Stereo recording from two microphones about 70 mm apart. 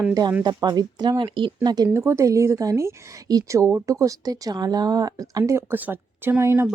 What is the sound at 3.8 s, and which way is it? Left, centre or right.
Speech, right.